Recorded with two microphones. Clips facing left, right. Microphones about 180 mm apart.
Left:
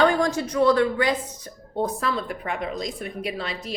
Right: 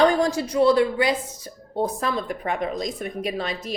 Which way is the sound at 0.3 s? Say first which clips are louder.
Right 1 dB; 30° right (ahead or behind).